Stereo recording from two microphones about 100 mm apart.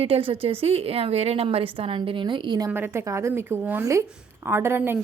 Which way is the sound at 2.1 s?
55° right (ahead or behind).